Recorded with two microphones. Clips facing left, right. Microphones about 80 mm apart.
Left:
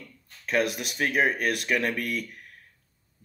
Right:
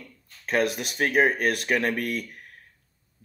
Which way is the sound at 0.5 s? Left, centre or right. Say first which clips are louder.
Right 1 dB; right.